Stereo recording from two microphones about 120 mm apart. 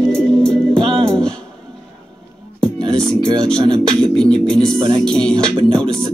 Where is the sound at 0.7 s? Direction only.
45° right (ahead or behind).